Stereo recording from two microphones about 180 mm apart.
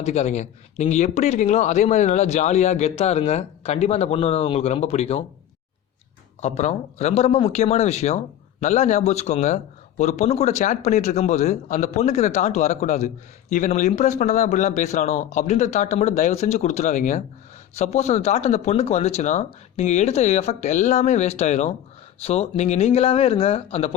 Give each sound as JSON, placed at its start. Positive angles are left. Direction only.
{"t": 0.0, "sound": "speech", "side_deg": 40}
{"t": 6.4, "sound": "speech", "side_deg": 35}